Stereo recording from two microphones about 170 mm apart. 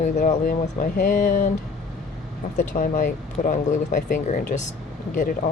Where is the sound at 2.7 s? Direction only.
50° left (ahead or behind).